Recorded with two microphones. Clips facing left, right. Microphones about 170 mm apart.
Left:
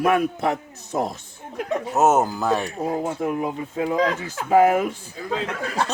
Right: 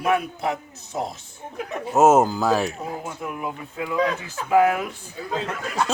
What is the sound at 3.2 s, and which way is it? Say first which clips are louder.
A man's voice: left 6 dB; 35° left (ahead or behind).